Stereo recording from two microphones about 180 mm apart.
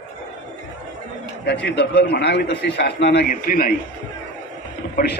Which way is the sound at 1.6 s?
75° left (ahead or behind).